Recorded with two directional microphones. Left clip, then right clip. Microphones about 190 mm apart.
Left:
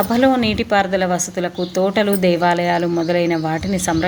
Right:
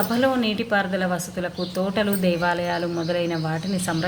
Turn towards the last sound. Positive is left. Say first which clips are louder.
# left 7 dB
turn(degrees=40)  # may be behind; listen again after turning